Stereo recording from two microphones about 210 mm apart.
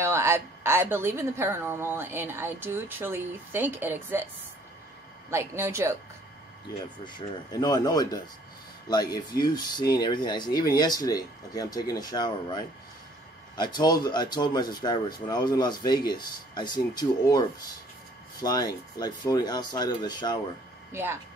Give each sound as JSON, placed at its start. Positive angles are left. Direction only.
{"t": 0.0, "sound": "a woman's voice", "side_deg": -10}
{"t": 5.3, "sound": "a woman's voice", "side_deg": -10}
{"t": 7.1, "sound": "speech", "side_deg": 20}
{"t": 9.4, "sound": "speech", "side_deg": 20}
{"t": 18.4, "sound": "speech", "side_deg": 20}
{"t": 20.9, "sound": "a woman's voice", "side_deg": -10}